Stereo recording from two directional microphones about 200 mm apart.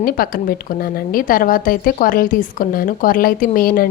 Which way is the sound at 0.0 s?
45° left (ahead or behind).